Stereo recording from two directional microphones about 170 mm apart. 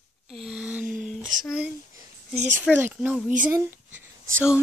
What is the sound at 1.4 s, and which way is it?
Speech, 5° right (ahead or behind).